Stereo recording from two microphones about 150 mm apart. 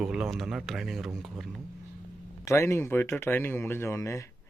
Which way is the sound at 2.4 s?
20° left (ahead or behind).